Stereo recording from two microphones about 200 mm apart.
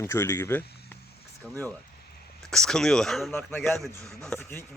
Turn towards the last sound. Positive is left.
turn(degrees=10)  # may be behind; listen again after turning